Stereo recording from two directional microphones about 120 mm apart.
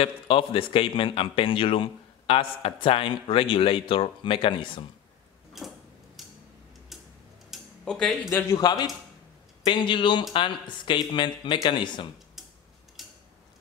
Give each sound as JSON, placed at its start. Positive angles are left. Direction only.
{"t": 0.0, "sound": "a man's voice", "side_deg": 45}
{"t": 5.6, "sound": "a sound", "side_deg": 0}
{"t": 6.9, "sound": "tick-tock", "side_deg": 0}
{"t": 8.3, "sound": "a man's voice", "side_deg": 25}
{"t": 8.5, "sound": "a man's voice", "side_deg": 35}
{"t": 13.0, "sound": "mechanisms", "side_deg": 0}